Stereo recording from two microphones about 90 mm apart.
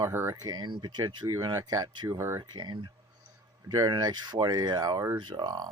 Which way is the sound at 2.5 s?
55° right (ahead or behind).